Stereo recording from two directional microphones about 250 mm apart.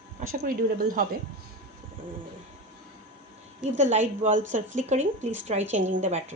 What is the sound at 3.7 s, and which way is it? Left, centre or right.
Speech, right.